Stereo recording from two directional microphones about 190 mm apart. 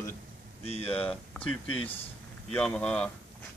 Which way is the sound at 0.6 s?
30° left (ahead or behind).